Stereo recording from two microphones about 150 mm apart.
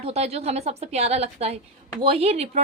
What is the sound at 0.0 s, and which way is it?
A woman's voice, 45° right (ahead or behind).